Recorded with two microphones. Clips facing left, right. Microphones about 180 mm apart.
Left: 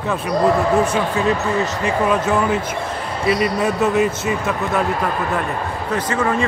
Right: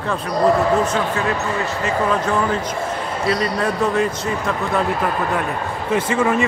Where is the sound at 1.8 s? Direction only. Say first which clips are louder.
Even; 10° left (ahead or behind).